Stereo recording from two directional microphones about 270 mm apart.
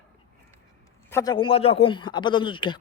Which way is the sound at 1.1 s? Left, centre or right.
Centre.